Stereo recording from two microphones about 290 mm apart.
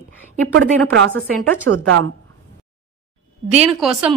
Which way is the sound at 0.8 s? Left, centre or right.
Right.